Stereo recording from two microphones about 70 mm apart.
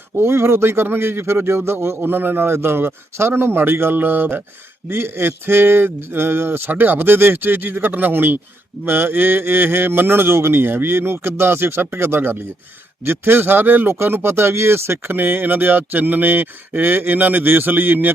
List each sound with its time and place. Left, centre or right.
0.2 s a man's voice: right